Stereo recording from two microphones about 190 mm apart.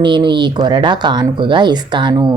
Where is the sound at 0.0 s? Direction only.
25° right (ahead or behind).